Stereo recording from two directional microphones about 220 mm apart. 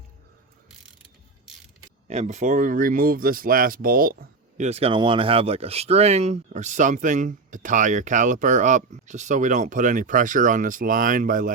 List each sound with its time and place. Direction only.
2.0 s speech: 30° right (ahead or behind)